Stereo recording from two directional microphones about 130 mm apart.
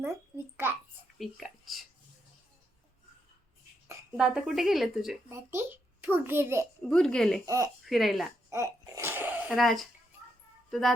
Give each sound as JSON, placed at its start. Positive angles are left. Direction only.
{"t": 0.0, "sound": "a sound", "side_deg": -15}
{"t": 1.2, "sound": "a sound", "side_deg": 0}
{"t": 4.2, "sound": "speech", "side_deg": -5}
{"t": 5.3, "sound": "a child's voice", "side_deg": -20}
{"t": 6.8, "sound": "speech", "side_deg": 5}
{"t": 7.4, "sound": "speech", "side_deg": -25}
{"t": 7.9, "sound": "speech", "side_deg": 0}
{"t": 8.4, "sound": "babbling", "side_deg": -20}
{"t": 9.6, "sound": "speech", "side_deg": 0}